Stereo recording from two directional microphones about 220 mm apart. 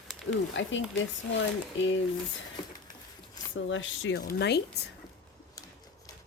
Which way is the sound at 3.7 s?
60° left (ahead or behind).